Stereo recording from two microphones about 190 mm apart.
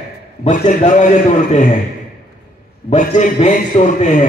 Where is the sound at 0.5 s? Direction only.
40° left (ahead or behind).